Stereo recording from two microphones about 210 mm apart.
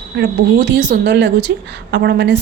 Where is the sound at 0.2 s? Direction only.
55° right (ahead or behind).